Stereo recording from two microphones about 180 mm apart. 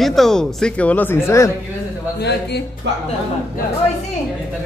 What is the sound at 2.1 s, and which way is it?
Speech, 65° left (ahead or behind).